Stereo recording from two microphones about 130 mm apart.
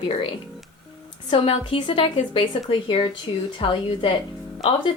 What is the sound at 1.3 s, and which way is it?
Speech, 45° left (ahead or behind).